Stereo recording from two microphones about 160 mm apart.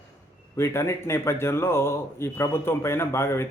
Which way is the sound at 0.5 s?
15° left (ahead or behind).